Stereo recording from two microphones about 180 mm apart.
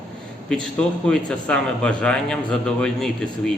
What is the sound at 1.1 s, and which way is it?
A man's voice, 5° left (ahead or behind).